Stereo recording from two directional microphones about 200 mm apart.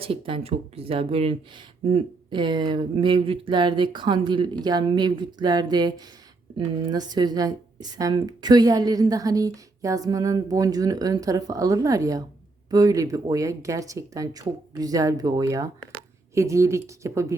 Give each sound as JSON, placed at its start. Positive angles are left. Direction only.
{"t": 0.0, "sound": "a woman's voice", "side_deg": -25}